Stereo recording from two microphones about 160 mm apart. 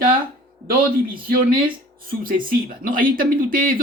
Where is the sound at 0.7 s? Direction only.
65° right (ahead or behind).